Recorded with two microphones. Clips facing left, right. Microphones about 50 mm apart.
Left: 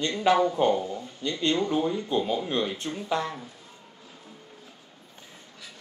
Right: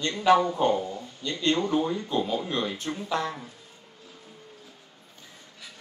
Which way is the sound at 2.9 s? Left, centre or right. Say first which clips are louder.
Right 1 dB; right.